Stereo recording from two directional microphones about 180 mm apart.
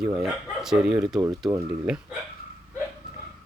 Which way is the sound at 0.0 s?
5° right (ahead or behind).